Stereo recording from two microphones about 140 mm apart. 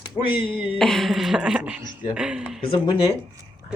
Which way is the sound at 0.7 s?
Centre (ahead or behind).